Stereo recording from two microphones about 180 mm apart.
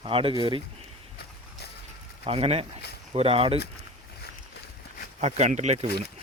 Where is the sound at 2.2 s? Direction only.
35° right (ahead or behind).